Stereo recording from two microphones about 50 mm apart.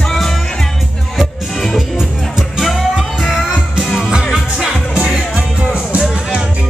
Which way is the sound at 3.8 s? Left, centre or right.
Centre.